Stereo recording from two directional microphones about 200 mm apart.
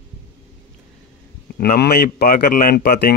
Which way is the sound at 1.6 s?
50° left (ahead or behind).